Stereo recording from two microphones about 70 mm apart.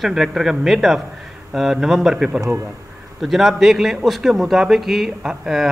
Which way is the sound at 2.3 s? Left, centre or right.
Right.